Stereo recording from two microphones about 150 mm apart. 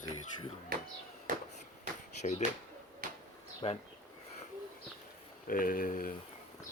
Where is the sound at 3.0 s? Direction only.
70° right (ahead or behind).